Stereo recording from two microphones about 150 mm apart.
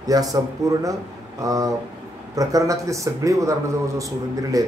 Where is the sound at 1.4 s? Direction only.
20° right (ahead or behind).